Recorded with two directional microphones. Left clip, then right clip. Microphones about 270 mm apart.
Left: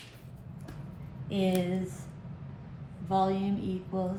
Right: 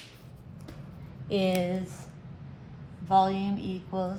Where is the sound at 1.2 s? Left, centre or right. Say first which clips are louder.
Right 4 dB; right.